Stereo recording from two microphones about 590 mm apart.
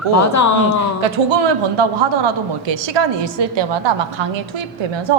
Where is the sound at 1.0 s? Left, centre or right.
Right.